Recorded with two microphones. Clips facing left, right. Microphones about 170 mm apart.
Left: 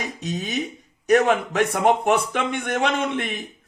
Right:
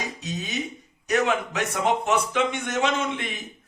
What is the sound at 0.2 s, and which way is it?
A man's voice, 55° left (ahead or behind).